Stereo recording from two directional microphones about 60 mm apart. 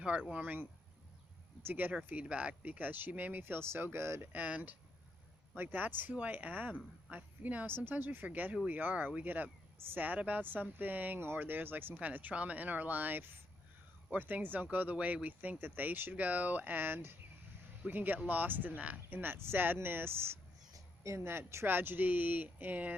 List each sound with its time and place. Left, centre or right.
0.0 s speech: centre
2.2 s speech: right
3.4 s speech: right
4.3 s speech: right
7.7 s speech: right
20.7 s a sound: right
21.2 s speech: right